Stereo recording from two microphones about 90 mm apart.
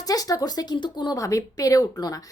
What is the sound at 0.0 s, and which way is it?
Speech, 40° left (ahead or behind).